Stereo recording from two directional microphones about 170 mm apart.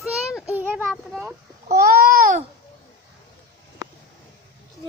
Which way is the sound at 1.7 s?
65° right (ahead or behind).